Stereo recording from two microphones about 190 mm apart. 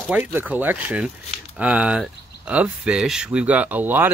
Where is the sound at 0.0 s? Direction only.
10° right (ahead or behind).